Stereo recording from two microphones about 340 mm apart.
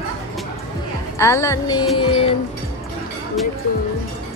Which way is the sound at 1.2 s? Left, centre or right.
Centre.